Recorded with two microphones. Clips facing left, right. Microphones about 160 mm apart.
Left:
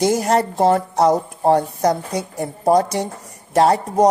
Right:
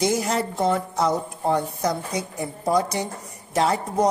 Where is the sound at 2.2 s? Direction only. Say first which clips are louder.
Left 5 dB; 65° left (ahead or behind).